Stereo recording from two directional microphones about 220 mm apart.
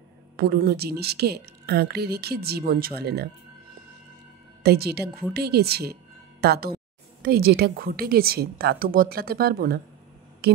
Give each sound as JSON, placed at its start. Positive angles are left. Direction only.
{"t": 0.4, "sound": "a woman's voice", "side_deg": -45}
{"t": 4.6, "sound": "a woman's voice", "side_deg": -45}